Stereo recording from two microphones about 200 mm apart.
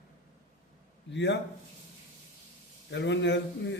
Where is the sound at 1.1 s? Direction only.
60° left (ahead or behind).